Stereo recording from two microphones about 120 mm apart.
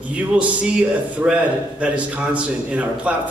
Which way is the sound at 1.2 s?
15° right (ahead or behind).